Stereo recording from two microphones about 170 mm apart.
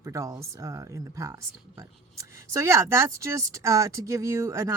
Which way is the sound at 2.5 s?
15° right (ahead or behind).